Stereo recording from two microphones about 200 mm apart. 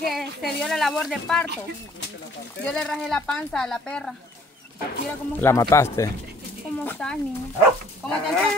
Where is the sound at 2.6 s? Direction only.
5° left (ahead or behind).